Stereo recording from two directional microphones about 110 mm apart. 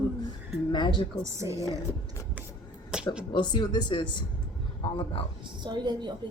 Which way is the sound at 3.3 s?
40° left (ahead or behind).